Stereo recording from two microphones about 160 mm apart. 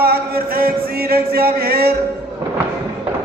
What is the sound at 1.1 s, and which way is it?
Speech, 75° right (ahead or behind).